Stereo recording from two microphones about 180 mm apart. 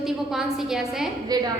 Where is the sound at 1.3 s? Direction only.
20° right (ahead or behind).